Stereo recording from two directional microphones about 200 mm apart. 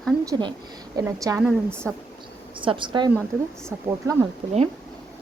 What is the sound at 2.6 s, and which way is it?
Speech, 25° right (ahead or behind).